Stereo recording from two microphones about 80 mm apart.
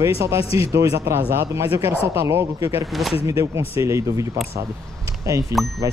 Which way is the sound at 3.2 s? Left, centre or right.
Right.